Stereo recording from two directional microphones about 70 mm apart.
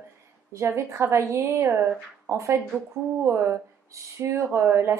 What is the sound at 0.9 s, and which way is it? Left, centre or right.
Speech, right.